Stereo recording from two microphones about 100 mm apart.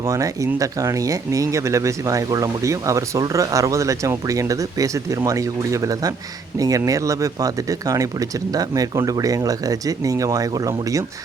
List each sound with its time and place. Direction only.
0.1 s speech: 35° right (ahead or behind)